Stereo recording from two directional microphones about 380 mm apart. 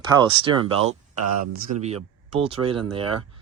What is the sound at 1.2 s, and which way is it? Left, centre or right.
Speech, right.